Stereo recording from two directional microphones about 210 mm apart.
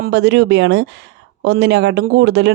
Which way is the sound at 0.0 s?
55° right (ahead or behind).